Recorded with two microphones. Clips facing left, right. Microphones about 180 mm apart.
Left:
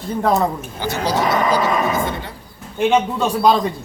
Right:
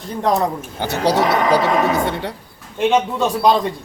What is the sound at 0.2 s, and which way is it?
Speech, 5° left (ahead or behind).